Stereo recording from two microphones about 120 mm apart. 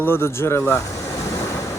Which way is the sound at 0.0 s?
20° left (ahead or behind).